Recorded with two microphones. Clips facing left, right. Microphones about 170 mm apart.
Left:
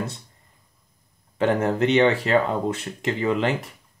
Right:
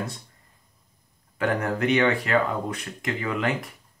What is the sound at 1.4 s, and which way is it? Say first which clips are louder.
Speech: left 4 dB; 25° left (ahead or behind).